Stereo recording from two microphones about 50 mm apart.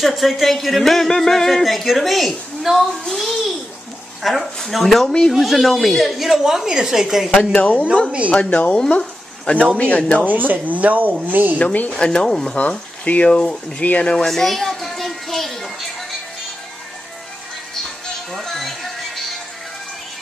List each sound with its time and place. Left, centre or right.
0.0 s a woman's voice: centre
7.3 s speech: left
10.2 s speech: right
11.5 s speech: left
12.0 s speech: centre
12.5 s speech: left
13.3 s speech: centre
14.1 s music: centre
17.8 s music: centre